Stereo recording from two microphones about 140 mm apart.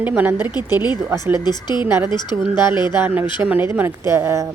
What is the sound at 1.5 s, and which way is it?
Speech, 30° left (ahead or behind).